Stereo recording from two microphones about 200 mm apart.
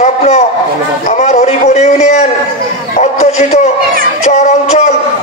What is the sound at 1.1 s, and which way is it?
A man's voice, 35° left (ahead or behind).